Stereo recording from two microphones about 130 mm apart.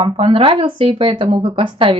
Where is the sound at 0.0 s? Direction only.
45° right (ahead or behind).